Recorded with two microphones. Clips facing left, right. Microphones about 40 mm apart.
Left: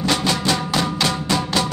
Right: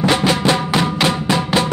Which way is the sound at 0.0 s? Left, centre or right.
Right.